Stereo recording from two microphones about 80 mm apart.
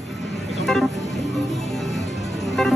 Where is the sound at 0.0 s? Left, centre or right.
Centre.